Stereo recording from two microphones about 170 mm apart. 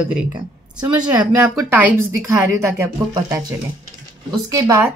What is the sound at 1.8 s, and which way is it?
A woman's voice, 10° right (ahead or behind).